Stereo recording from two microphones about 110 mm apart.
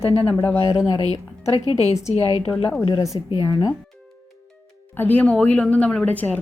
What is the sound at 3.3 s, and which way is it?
Speech, 40° left (ahead or behind).